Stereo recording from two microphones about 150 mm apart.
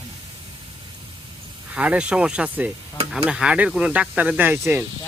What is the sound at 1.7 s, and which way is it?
Speech, 10° right (ahead or behind).